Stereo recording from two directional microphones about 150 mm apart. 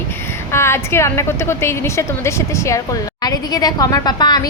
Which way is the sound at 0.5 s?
15° left (ahead or behind).